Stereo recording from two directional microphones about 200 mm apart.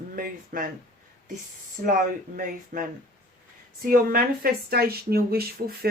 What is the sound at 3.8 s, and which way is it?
Speech, 45° right (ahead or behind).